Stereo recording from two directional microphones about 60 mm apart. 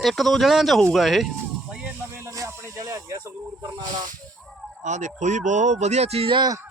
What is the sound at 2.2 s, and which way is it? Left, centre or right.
Music, right.